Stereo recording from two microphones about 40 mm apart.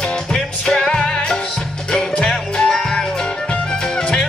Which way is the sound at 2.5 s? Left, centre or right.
Centre.